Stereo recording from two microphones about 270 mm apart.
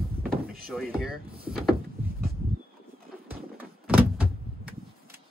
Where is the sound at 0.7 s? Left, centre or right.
Centre.